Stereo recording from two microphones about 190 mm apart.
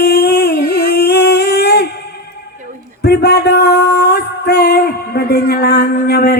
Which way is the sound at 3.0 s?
60° left (ahead or behind).